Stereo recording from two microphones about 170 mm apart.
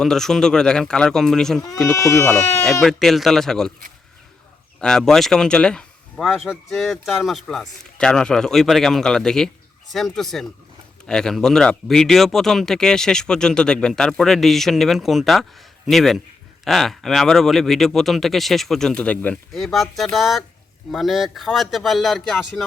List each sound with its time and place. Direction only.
0.0 s speech: 5° left (ahead or behind)
2.0 s speech: 15° left (ahead or behind)
2.8 s speech: centre (ahead or behind)
4.8 s speech: 5° left (ahead or behind)